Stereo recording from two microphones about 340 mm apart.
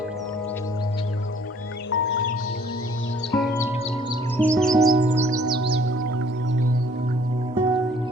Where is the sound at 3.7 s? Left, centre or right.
Centre.